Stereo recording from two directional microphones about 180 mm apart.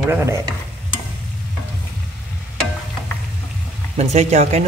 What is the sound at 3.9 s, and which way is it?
Speech, 40° right (ahead or behind).